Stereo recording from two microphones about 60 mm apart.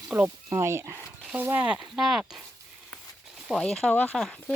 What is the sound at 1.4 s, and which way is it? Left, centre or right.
Speech, right.